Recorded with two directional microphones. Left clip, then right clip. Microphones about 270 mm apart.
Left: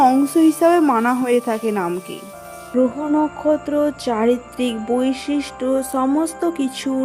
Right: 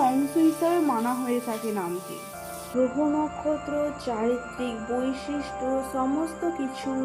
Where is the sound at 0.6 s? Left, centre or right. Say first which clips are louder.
Left 10 dB; left.